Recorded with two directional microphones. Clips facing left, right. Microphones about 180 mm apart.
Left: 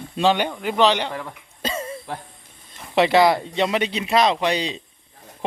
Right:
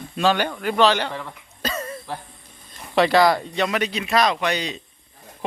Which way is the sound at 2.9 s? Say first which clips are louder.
Left 1 dB; 25° left (ahead or behind).